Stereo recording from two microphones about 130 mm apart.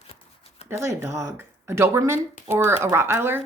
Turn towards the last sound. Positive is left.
turn(degrees=-15)  # may be behind; listen again after turning